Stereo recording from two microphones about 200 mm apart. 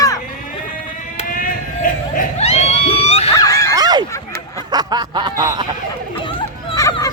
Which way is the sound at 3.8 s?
20° right (ahead or behind).